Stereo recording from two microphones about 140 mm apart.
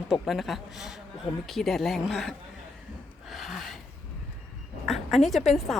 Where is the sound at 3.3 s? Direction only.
Centre (ahead or behind).